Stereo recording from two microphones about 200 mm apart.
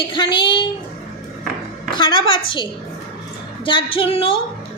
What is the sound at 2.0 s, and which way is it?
Speech, 25° left (ahead or behind).